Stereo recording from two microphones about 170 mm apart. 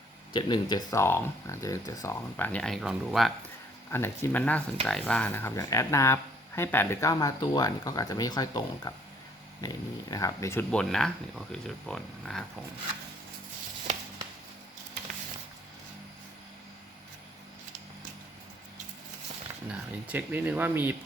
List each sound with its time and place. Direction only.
0.3 s speech: 25° left (ahead or behind); by 3.3 s centre (ahead or behind)
3.9 s speech: 15° left (ahead or behind)
13.9 s a sound: 45° right (ahead or behind)
20.1 s speech: 10° right (ahead or behind)